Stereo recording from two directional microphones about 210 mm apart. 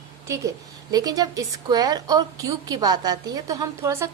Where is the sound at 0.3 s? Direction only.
15° right (ahead or behind).